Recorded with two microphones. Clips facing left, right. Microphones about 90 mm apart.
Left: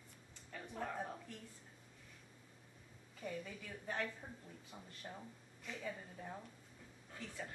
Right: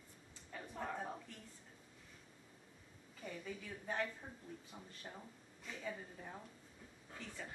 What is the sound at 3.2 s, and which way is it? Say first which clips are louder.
Speech: left 1 dB; centre (ahead or behind).